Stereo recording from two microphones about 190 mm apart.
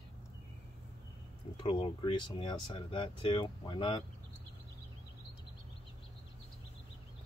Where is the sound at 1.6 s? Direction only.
25° left (ahead or behind).